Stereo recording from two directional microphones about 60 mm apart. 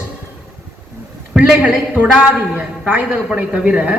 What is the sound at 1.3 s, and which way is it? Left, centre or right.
Speech, centre.